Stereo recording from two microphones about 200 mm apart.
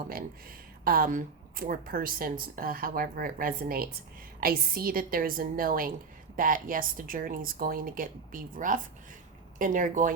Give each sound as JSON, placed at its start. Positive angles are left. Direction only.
{"t": 0.1, "sound": "speech", "side_deg": -45}